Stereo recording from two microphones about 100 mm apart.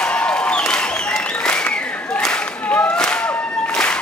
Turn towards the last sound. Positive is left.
turn(degrees=10)  # may be behind; listen again after turning